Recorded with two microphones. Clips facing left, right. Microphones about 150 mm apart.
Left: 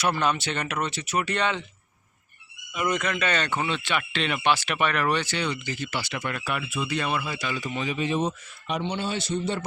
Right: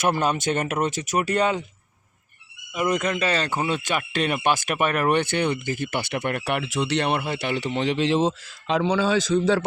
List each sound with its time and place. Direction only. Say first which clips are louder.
0.2 s speech: right 3 dB; 45° right (ahead or behind)
2.7 s speech: right 3 dB; 35° right (ahead or behind)
3.8 s speech: right 3 dB; 45° right (ahead or behind); by 9.6 s 90° right